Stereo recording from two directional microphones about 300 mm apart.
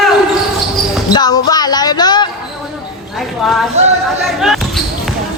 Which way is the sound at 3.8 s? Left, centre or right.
Right.